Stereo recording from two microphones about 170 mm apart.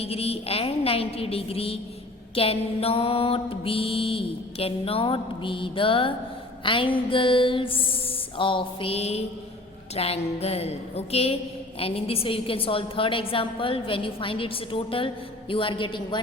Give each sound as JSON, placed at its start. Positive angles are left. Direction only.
{"t": 0.0, "sound": "mantra", "side_deg": 35}